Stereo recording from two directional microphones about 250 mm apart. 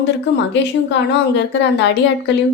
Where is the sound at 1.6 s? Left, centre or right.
Left.